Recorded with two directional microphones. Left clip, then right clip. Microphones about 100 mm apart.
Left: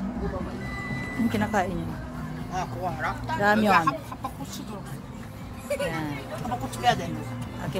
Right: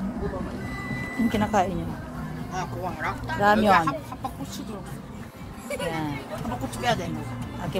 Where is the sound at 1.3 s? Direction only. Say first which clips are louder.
Right 3 dB; 10° right (ahead or behind).